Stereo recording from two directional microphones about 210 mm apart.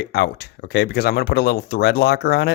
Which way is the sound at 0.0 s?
55° left (ahead or behind).